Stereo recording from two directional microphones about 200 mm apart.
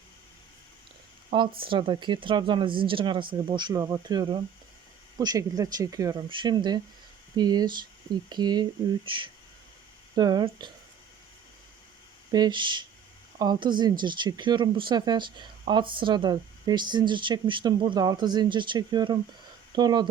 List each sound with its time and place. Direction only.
1.3 s speech: 25° right (ahead or behind)
12.3 s speech: 20° right (ahead or behind)